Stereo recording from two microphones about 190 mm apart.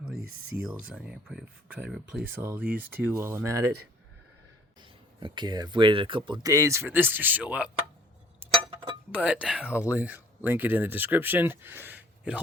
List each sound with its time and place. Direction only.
0.0 s speech: 5° right (ahead or behind)
4.8 s speech: 25° right (ahead or behind); by 7.7 s 5° right (ahead or behind)
8.4 s chink: 10° right (ahead or behind)
9.4 s speech: 5° right (ahead or behind)